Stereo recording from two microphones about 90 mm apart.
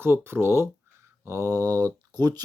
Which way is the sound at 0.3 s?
25° right (ahead or behind).